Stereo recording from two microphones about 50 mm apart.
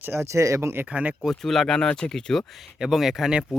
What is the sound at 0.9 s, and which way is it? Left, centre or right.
Speech, right.